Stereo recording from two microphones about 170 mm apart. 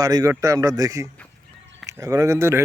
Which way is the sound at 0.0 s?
20° right (ahead or behind).